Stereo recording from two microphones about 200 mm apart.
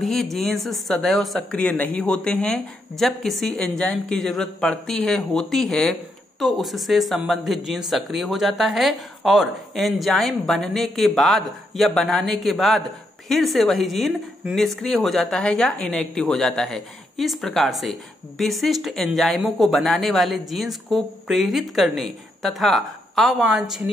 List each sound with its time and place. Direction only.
0.0 s speech: centre (ahead or behind)